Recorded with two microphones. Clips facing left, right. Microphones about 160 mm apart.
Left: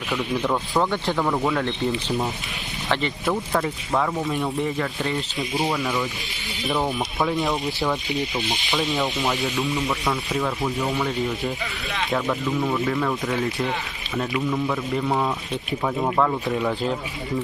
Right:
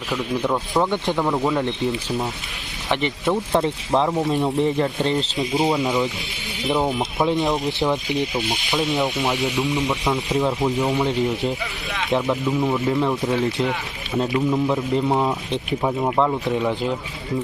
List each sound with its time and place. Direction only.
0.1 s rub: centre (ahead or behind)
0.7 s speech: 15° right (ahead or behind)
2.9 s speech: 20° right (ahead or behind)
8.4 s rub: 5° right (ahead or behind)
9.2 s speech: 15° right (ahead or behind)